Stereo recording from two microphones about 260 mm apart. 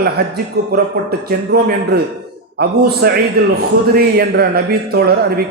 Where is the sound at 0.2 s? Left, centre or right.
Right.